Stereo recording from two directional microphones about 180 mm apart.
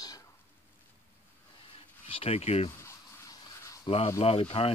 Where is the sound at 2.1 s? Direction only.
35° left (ahead or behind).